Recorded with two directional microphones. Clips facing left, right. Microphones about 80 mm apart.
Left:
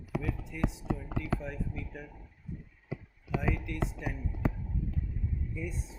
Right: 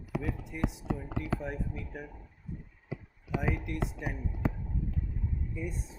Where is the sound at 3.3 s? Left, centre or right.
Right.